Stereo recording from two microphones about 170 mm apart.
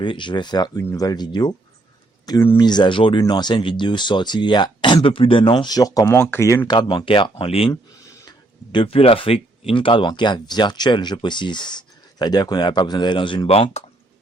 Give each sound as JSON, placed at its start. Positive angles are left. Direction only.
{"t": 0.0, "sound": "speech", "side_deg": 30}
{"t": 2.6, "sound": "speech", "side_deg": 25}
{"t": 6.7, "sound": "speech", "side_deg": 25}
{"t": 8.0, "sound": "speech", "side_deg": 20}